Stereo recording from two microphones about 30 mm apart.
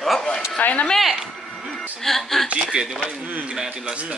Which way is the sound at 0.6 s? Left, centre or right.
Left.